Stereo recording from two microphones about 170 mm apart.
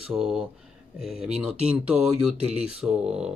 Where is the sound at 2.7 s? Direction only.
5° right (ahead or behind).